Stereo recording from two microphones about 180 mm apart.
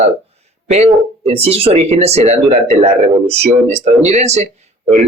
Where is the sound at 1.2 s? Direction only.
35° right (ahead or behind).